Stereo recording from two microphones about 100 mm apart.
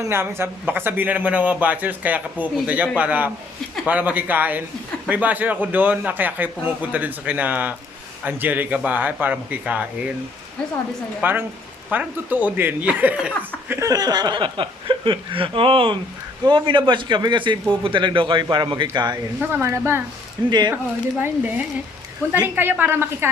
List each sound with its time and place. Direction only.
0.0 s a man's voice: 25° right (ahead or behind)
11.2 s a woman's voice: 20° right (ahead or behind)
13.7 s a man's voice: 35° right (ahead or behind)
19.4 s a woman's voice: 20° right (ahead or behind)
20.5 s a man's voice: 45° right (ahead or behind)
21.2 s a man's voice: 15° right (ahead or behind)